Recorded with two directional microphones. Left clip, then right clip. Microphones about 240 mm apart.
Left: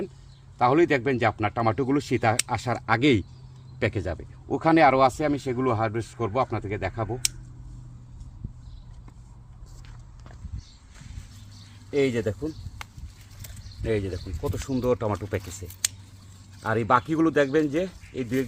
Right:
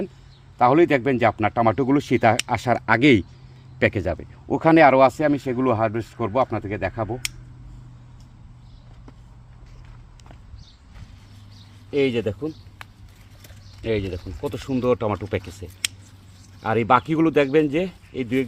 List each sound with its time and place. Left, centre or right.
0.6 s speech: right
11.9 s speech: right
13.8 s speech: right
16.6 s speech: right